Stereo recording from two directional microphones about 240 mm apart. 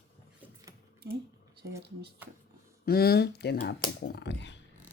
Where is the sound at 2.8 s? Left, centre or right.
Left.